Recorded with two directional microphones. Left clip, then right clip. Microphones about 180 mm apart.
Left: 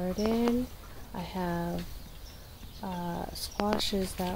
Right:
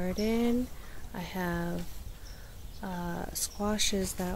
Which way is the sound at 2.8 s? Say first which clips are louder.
Left 1 dB; 20° right (ahead or behind).